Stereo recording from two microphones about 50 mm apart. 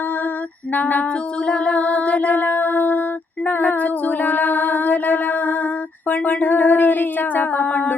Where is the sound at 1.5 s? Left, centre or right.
Left.